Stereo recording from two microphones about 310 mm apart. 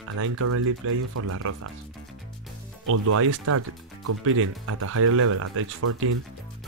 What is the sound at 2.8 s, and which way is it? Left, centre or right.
Speech, right.